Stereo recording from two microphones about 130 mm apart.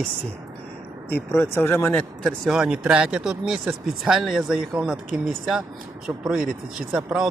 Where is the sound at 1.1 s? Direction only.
15° left (ahead or behind).